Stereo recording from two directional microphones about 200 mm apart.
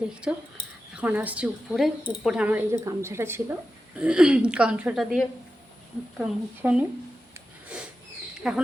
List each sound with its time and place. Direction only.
0.0 s a woman's voice: 5° right (ahead or behind)
8.4 s a woman's voice: centre (ahead or behind)